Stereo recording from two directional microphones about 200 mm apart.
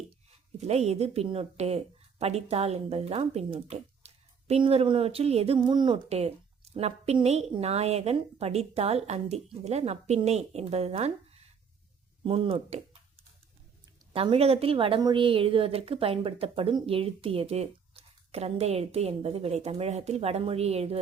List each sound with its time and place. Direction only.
0.6 s a woman's voice: 35° right (ahead or behind)
14.1 s a woman's voice: 30° right (ahead or behind)